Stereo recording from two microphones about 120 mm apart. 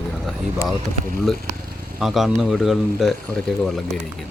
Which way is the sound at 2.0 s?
5° right (ahead or behind).